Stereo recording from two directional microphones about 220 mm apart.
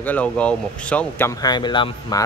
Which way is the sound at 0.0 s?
5° left (ahead or behind).